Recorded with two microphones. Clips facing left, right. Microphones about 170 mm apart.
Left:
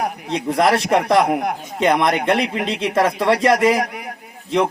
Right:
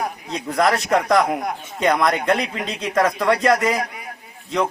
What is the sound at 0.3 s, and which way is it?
A man's voice, 30° left (ahead or behind).